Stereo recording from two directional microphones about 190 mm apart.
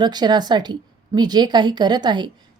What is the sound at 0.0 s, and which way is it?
A woman's voice, 20° right (ahead or behind).